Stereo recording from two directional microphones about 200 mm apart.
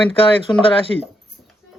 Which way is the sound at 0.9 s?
80° left.